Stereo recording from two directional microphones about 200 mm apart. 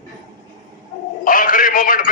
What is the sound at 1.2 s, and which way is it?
Speech, 45° left (ahead or behind).